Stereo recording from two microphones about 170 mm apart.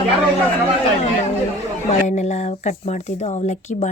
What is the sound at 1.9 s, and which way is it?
Speech, 40° left (ahead or behind).